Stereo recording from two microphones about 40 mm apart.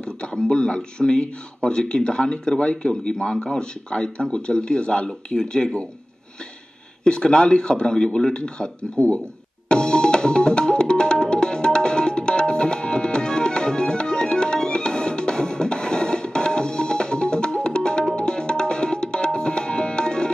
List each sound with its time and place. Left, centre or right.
0.3 s speech: centre
7.1 s speech: left
9.7 s music: left
18.1 s tabla: left